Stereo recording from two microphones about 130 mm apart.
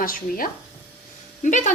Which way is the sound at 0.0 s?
90° left.